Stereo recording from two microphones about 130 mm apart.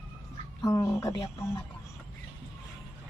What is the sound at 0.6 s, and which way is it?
Speech, 25° left (ahead or behind).